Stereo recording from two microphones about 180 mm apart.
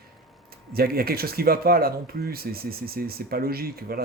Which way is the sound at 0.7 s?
55° right (ahead or behind).